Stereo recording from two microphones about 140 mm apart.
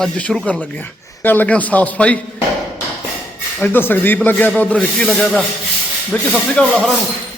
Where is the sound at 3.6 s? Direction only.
15° left (ahead or behind); by 7.0 s 5° right (ahead or behind).